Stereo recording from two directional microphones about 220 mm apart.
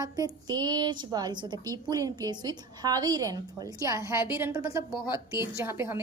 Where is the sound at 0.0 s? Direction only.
15° right (ahead or behind).